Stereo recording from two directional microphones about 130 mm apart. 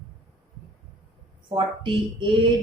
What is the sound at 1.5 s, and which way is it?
Speech, 40° right (ahead or behind).